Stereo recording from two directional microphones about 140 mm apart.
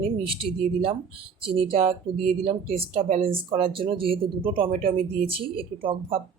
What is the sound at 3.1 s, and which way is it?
Speech, 80° right.